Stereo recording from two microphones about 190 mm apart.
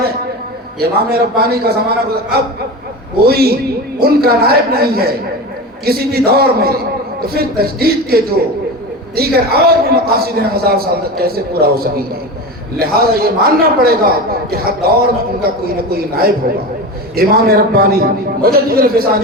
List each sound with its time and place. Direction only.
0.8 s a man's voice: 55° right (ahead or behind)
3.2 s a man's voice: 55° right (ahead or behind)